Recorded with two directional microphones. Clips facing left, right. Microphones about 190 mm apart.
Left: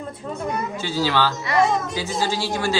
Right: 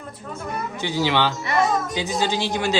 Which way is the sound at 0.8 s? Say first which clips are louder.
Right 1 dB; 15° right (ahead or behind).